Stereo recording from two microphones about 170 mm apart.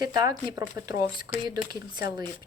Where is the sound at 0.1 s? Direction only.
20° right (ahead or behind).